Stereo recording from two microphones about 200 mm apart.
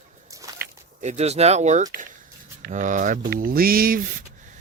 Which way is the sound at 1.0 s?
35° right (ahead or behind).